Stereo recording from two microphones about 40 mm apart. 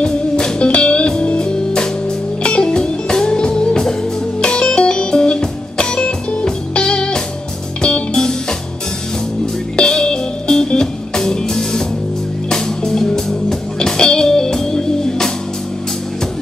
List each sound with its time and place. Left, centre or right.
0.0 s music: left
9.8 s music: left